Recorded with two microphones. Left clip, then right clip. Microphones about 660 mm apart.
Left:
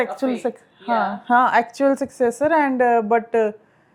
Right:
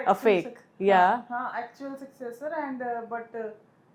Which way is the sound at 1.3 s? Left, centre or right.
Left.